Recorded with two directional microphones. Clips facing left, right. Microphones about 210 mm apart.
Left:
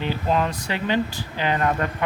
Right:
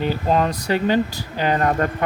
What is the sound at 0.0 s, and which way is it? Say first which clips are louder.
Speech: right 3 dB; 40° right (ahead or behind).